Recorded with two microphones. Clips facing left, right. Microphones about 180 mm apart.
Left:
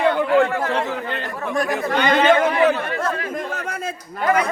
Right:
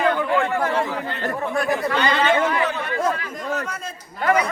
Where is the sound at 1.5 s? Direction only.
45° left (ahead or behind).